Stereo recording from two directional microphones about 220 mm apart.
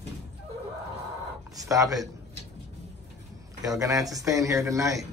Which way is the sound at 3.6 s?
15° right (ahead or behind).